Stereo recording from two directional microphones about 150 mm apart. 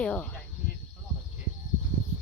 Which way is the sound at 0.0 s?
10° left (ahead or behind).